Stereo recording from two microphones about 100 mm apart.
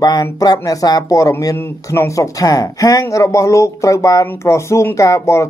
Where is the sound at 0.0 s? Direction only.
40° left (ahead or behind).